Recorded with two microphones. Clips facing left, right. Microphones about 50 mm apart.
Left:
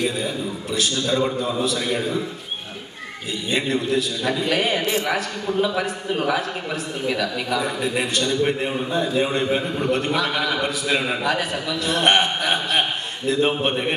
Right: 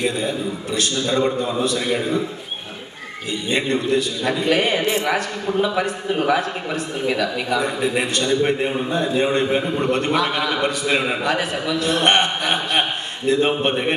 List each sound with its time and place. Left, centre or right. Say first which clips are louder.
0.2 s a man's voice: right 3 dB; centre
1.8 s a man's voice: right 2 dB; centre
3.4 s a man's voice: right 2 dB; centre
4.8 s a man's voice: right 2 dB; right
5.6 s a man's voice: right 2 dB; centre